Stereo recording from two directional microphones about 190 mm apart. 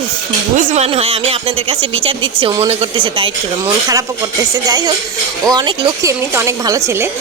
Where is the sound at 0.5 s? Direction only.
40° right (ahead or behind).